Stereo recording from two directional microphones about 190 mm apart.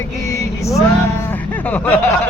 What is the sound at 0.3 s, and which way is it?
Vehicle, 15° left (ahead or behind).